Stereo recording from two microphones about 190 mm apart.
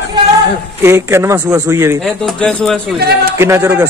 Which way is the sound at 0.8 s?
15° right (ahead or behind).